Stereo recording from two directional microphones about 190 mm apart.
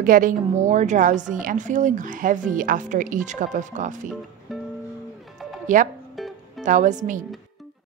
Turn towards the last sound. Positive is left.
turn(degrees=-40)  # may be behind; listen again after turning